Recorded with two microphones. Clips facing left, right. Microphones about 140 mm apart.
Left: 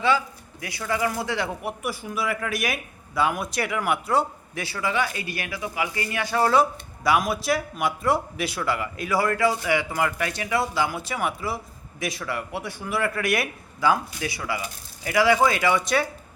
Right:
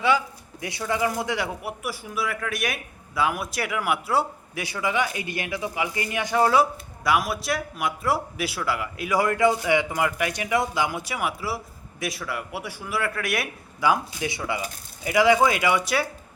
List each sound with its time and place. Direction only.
0.6 s speech: 20° right (ahead or behind)
1.6 s a man's voice: centre (ahead or behind)
7.0 s a man's voice: centre (ahead or behind)
9.0 s a man's voice: 15° right (ahead or behind); by 13.5 s centre (ahead or behind)
13.8 s a man's voice: 20° right (ahead or behind)